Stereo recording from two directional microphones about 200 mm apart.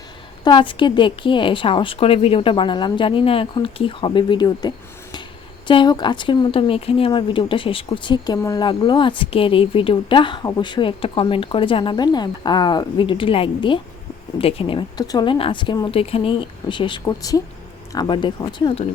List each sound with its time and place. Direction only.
0.4 s speech: 25° left (ahead or behind)